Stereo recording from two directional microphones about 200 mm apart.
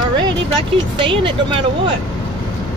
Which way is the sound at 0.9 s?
25° right (ahead or behind).